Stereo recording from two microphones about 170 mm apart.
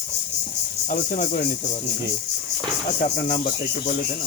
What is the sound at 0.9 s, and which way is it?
Speech, 50° left (ahead or behind).